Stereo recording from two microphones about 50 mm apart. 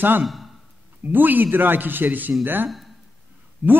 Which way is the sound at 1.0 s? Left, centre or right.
Right.